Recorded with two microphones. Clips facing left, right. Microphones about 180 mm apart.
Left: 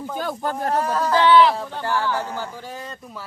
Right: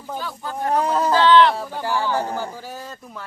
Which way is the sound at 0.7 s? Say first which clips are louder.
Right 3 dB; 20° right (ahead or behind).